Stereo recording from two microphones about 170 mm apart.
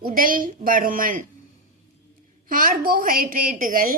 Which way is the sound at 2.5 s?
55° right (ahead or behind).